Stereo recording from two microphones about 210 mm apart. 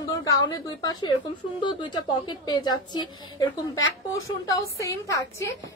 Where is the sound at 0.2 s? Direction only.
15° left (ahead or behind).